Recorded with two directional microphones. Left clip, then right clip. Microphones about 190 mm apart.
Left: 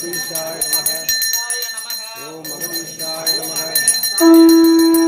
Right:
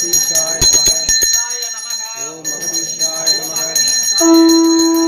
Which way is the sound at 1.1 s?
35° left (ahead or behind).